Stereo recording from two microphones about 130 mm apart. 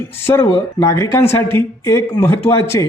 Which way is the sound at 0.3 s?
20° left (ahead or behind).